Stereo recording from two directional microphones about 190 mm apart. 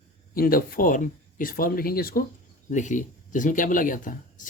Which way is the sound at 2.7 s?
40° left (ahead or behind).